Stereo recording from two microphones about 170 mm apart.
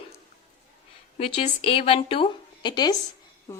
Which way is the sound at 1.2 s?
35° left (ahead or behind).